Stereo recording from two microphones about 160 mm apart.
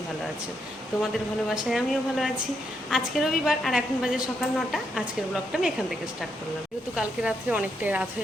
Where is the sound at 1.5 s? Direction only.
Centre (ahead or behind).